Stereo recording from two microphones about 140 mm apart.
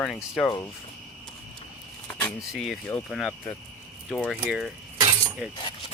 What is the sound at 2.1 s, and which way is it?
Keys jangling, 15° left (ahead or behind).